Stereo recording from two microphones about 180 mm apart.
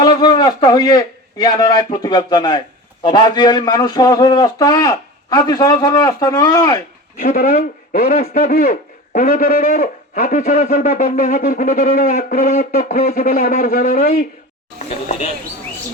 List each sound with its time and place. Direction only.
0.0 s a man's voice: 25° left (ahead or behind)
7.2 s a sound: 45° left (ahead or behind)
14.8 s speech: 35° left (ahead or behind)